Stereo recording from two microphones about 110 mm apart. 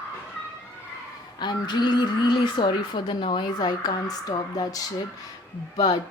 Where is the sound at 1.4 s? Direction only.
40° left (ahead or behind).